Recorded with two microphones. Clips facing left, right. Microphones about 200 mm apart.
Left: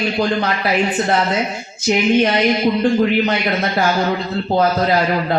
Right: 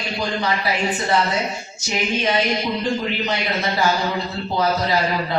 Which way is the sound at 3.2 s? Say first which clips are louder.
Left 4 dB; 55° left (ahead or behind).